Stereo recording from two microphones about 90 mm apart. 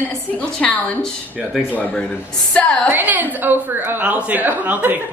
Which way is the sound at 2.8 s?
20° right (ahead or behind).